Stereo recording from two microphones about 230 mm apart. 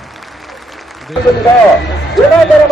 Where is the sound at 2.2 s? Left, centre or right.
Centre.